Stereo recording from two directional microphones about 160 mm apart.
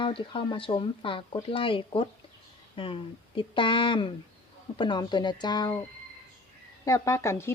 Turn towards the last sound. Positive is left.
turn(degrees=15)  # may be behind; listen again after turning